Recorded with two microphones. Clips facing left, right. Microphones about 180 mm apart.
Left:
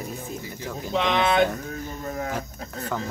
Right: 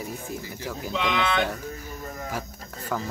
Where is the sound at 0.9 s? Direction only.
40° left (ahead or behind).